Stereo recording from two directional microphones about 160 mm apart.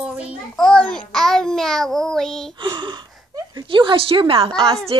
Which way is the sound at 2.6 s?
30° right (ahead or behind).